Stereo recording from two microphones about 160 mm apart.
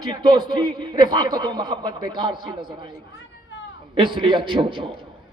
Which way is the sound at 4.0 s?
30° right (ahead or behind).